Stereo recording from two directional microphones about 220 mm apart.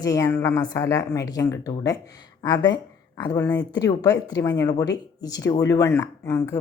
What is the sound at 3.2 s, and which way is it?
Speech, 20° left (ahead or behind).